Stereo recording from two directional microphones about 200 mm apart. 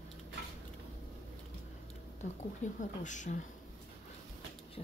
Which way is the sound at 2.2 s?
35° left (ahead or behind).